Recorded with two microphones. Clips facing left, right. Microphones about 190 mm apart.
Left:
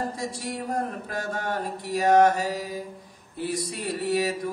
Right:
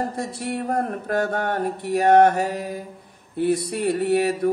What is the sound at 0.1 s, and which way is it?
Mantra, 60° right (ahead or behind).